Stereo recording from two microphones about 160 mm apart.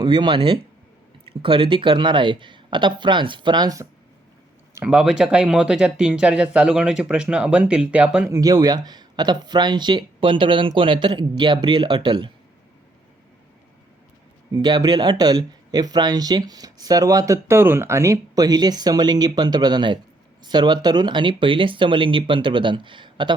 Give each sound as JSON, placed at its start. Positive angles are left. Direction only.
{"t": 0.0, "sound": "speech", "side_deg": -30}
{"t": 4.7, "sound": "speech", "side_deg": -5}
{"t": 8.3, "sound": "speech", "side_deg": -20}
{"t": 14.5, "sound": "speech", "side_deg": -25}